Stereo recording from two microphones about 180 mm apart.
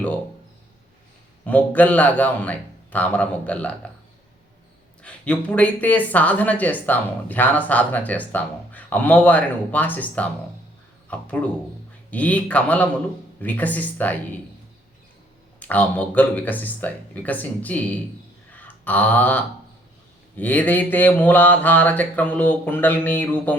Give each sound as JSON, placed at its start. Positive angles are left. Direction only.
{"t": 1.5, "sound": "speech", "side_deg": 10}
{"t": 5.0, "sound": "speech", "side_deg": 5}
{"t": 15.6, "sound": "speech", "side_deg": 10}
{"t": 18.5, "sound": "a sound", "side_deg": 10}
{"t": 20.3, "sound": "speech", "side_deg": 10}